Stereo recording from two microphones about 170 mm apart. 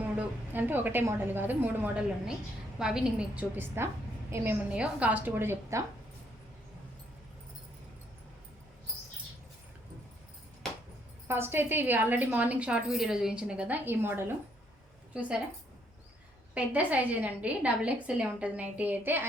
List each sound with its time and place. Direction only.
0.0 s a woman's voice: 10° right (ahead or behind)
11.3 s a woman's voice: 15° right (ahead or behind)
16.6 s a woman's voice: 10° right (ahead or behind)